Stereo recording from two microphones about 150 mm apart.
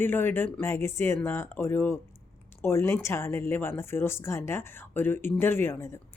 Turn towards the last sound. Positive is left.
turn(degrees=15)  # may be behind; listen again after turning